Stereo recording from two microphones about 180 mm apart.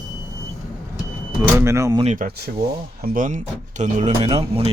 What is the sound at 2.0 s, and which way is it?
Speech, 50° right (ahead or behind).